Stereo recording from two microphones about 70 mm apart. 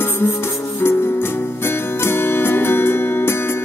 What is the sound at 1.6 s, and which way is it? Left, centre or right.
Music, left.